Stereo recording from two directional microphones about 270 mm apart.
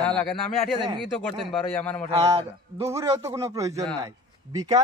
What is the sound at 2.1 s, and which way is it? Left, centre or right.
A man's voice, right.